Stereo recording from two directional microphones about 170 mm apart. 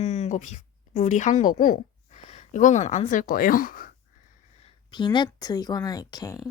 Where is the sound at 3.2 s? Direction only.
55° left (ahead or behind).